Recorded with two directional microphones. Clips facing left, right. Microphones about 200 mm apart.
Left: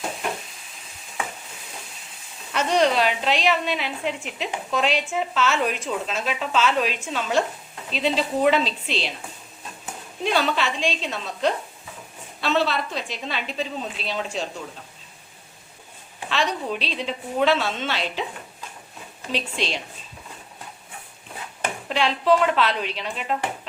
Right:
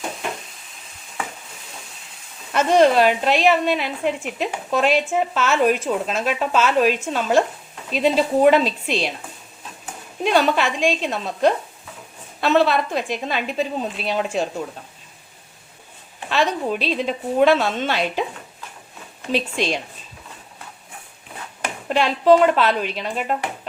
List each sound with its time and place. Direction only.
2.5 s a woman's voice: 50° right (ahead or behind)
10.2 s a woman's voice: 50° right (ahead or behind)
16.3 s a woman's voice: 45° right (ahead or behind)
19.3 s a woman's voice: 50° right (ahead or behind)
21.8 s a woman's voice: 45° right (ahead or behind)